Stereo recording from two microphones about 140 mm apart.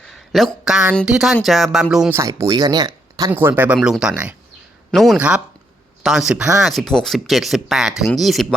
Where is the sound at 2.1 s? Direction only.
20° right (ahead or behind).